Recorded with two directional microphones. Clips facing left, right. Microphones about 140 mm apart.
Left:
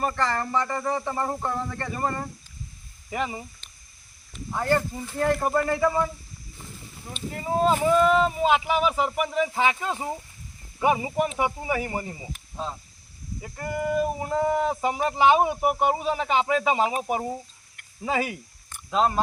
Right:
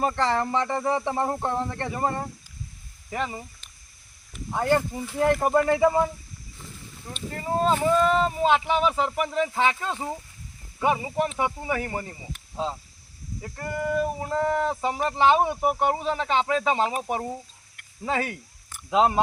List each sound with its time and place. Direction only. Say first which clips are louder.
0.0 s speech: right 2 dB; 25° right (ahead or behind)
3.1 s speech: left 1 dB; 10° left (ahead or behind)
4.3 s speech: right 1 dB; 10° right (ahead or behind)
7.1 s speech: even; 5° left (ahead or behind)
13.4 s speech: left 1 dB; 15° left (ahead or behind)
18.9 s speech: right 2 dB; 15° right (ahead or behind)